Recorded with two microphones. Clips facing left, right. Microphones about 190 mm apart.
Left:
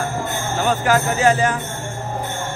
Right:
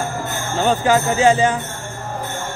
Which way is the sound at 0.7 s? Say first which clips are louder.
Right 2 dB; 25° right (ahead or behind).